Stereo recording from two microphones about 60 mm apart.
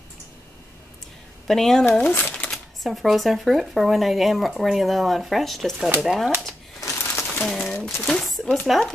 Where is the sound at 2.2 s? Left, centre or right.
Left.